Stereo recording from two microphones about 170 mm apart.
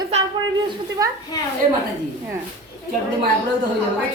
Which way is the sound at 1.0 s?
20° right (ahead or behind).